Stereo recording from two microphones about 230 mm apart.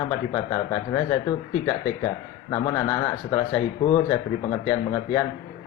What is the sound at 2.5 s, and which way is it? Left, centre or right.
Speech, centre.